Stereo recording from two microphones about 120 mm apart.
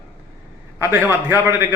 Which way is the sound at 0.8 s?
20° right (ahead or behind).